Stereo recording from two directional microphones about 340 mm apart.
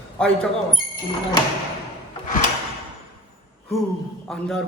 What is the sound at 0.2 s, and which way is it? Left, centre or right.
Speech, centre.